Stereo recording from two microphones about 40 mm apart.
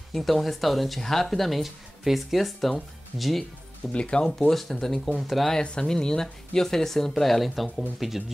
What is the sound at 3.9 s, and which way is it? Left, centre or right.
Speech, left.